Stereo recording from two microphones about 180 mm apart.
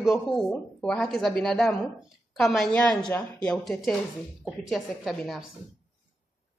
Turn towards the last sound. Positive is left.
turn(degrees=0)  # may be behind; listen again after turning